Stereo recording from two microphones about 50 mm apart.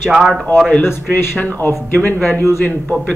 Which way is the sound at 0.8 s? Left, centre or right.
Left.